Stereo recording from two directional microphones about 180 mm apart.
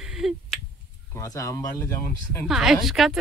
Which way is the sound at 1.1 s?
15° left (ahead or behind).